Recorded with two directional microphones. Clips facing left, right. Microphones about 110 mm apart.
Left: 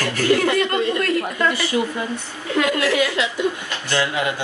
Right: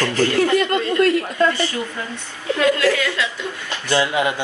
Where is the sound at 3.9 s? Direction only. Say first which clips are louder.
Right 3 dB; 20° right (ahead or behind).